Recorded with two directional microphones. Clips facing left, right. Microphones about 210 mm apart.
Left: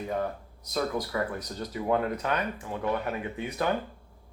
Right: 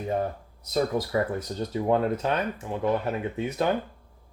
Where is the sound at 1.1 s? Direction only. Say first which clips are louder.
Right 5 dB; 25° right (ahead or behind).